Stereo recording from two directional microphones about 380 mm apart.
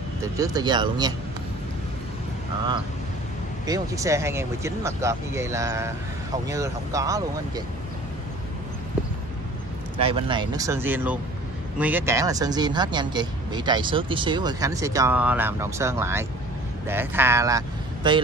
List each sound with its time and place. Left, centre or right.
0.4 s speech: centre
3.6 s speech: centre
9.9 s speech: centre